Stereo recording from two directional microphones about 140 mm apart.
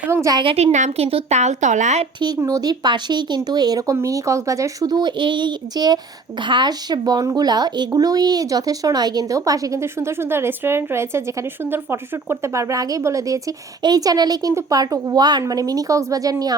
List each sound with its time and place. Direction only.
0.0 s speech: 20° right (ahead or behind)
0.3 s a woman's voice: 45° right (ahead or behind)
2.2 s speech: 25° right (ahead or behind)